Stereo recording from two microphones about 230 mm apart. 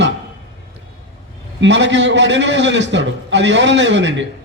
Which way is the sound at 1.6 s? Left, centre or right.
Right.